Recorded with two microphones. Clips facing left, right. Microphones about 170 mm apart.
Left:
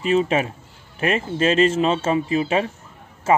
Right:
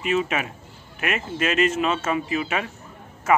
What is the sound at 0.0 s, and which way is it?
Speech, 35° left (ahead or behind).